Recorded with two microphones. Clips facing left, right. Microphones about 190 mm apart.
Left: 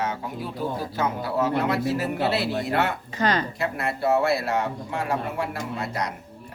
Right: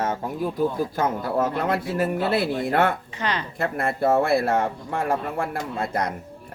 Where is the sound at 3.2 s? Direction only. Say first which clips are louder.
Left 7 dB; 40° left (ahead or behind).